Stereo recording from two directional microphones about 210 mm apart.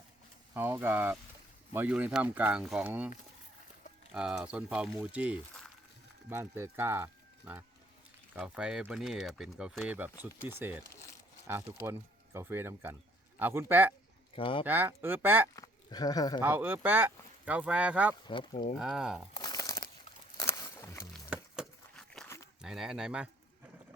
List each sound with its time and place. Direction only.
0.5 s speech: 10° right (ahead or behind)
4.1 s speech: 5° right (ahead or behind)
14.3 s speech: 25° left (ahead or behind)
14.6 s speech: 10° right (ahead or behind)
15.5 s speech: 15° left (ahead or behind)
16.4 s speech: 10° right (ahead or behind)
18.3 s speech: 25° left (ahead or behind)
18.8 s speech: 5° right (ahead or behind)
19.3 s crumpling: 20° left (ahead or behind)
20.4 s a sound: 15° left (ahead or behind)
21.2 s a sound: 5° right (ahead or behind)
22.6 s speech: centre (ahead or behind)